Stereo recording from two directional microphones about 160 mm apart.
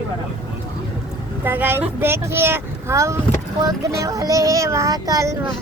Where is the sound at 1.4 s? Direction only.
10° right (ahead or behind).